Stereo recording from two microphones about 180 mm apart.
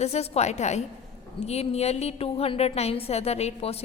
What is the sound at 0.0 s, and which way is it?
A woman's voice, 35° left (ahead or behind).